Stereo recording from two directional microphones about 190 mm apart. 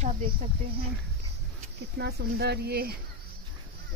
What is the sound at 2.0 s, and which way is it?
Speech, 55° right (ahead or behind).